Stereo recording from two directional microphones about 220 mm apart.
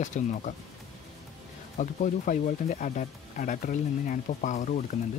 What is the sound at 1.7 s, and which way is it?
Speech, 35° left (ahead or behind).